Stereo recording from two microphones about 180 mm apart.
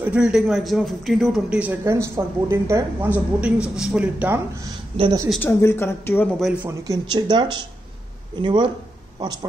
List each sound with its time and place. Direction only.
0.0 s a man's voice: 5° right (ahead or behind)
4.9 s a woman's voice: 30° right (ahead or behind)
5.4 s speech: 15° left (ahead or behind)
6.4 s a man's voice: 5° right (ahead or behind)
6.7 s speech: 20° right (ahead or behind)